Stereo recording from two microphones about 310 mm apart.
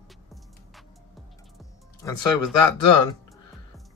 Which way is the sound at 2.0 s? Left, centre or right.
Centre.